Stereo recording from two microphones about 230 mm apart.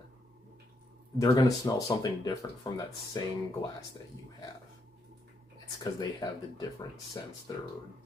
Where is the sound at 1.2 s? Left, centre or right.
Centre.